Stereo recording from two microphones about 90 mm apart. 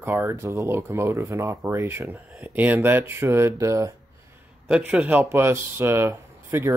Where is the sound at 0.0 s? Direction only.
25° right (ahead or behind).